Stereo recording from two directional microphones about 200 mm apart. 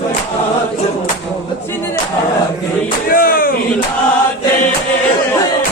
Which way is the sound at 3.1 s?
45° left (ahead or behind).